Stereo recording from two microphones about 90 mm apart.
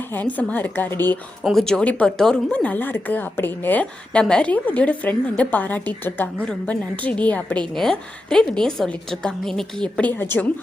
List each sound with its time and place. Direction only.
0.1 s a woman's voice: 20° left (ahead or behind)
1.5 s speech: 5° left (ahead or behind); by 10.4 s 20° left (ahead or behind)